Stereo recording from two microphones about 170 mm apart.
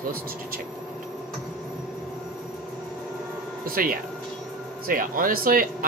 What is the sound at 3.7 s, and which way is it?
Speech, 55° right (ahead or behind).